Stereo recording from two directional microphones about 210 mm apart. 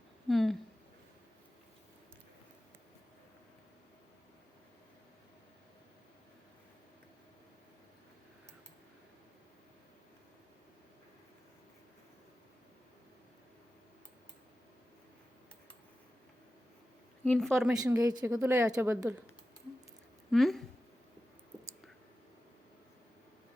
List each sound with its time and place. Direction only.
0.3 s a sound: centre (ahead or behind)
17.2 s speech: centre (ahead or behind)
17.8 s a woman's voice: 15° right (ahead or behind)
20.3 s speech: centre (ahead or behind)